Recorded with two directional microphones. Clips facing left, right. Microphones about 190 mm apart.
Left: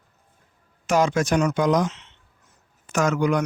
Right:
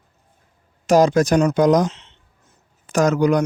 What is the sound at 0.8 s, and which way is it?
Speech, 35° right (ahead or behind).